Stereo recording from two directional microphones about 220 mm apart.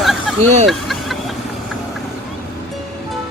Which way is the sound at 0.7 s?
Centre (ahead or behind).